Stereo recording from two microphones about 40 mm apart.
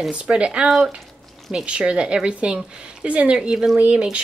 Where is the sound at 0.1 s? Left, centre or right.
Right.